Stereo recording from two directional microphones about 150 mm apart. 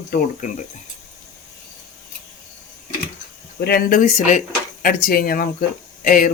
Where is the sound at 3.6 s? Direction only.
80° left.